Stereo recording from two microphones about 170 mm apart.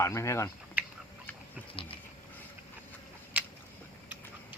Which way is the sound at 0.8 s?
10° right (ahead or behind).